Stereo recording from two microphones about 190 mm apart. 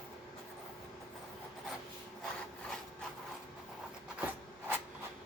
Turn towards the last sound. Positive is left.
turn(degrees=-10)  # may be behind; listen again after turning